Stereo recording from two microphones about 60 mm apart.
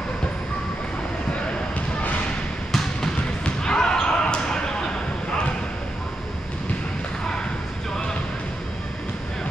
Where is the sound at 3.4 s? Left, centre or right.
Centre.